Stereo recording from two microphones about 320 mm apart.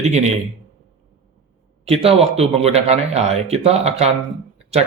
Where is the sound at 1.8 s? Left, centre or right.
Centre.